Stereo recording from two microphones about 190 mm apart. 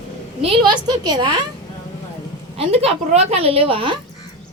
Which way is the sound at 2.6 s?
30° right (ahead or behind).